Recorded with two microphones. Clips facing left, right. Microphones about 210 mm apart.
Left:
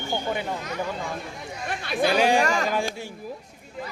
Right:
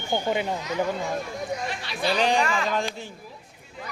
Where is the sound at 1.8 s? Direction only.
50° left (ahead or behind).